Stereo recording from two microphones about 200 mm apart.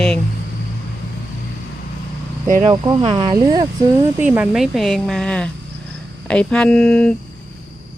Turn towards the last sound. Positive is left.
turn(degrees=5)  # may be behind; listen again after turning